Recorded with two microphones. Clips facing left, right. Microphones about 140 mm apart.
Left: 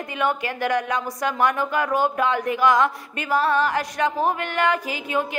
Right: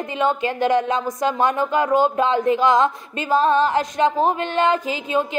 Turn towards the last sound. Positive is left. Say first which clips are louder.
# right 3 dB
turn(degrees=-20)  # may be behind; listen again after turning